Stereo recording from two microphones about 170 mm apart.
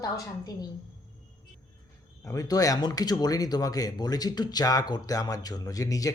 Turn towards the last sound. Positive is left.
turn(degrees=20)  # may be behind; listen again after turning